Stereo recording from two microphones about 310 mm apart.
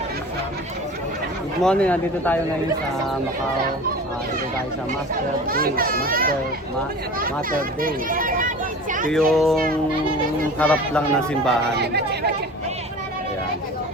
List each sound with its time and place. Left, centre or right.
1.6 s a man's voice: centre
5.5 s speech: right
9.1 s a man's voice: centre
10.6 s a man's voice: centre
11.7 s speech: right